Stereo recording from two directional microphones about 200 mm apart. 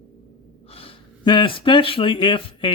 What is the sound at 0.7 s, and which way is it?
Speech, 25° left (ahead or behind).